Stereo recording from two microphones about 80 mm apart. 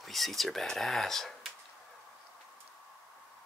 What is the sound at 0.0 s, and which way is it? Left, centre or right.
Speech, centre.